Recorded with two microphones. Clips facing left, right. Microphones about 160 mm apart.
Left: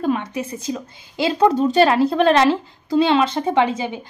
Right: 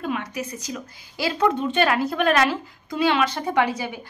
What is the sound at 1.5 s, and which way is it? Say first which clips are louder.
A woman's voice: left 6 dB; 35° left (ahead or behind).